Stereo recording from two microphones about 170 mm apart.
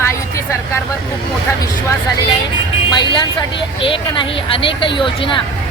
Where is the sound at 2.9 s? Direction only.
25° left (ahead or behind).